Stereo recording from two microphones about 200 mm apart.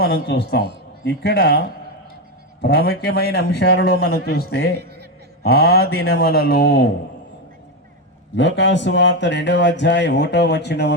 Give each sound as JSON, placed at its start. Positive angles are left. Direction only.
{"t": 0.0, "sound": "speech", "side_deg": 50}
{"t": 4.7, "sound": "a sound", "side_deg": -55}
{"t": 5.4, "sound": "speech", "side_deg": 50}
{"t": 8.4, "sound": "speech", "side_deg": 65}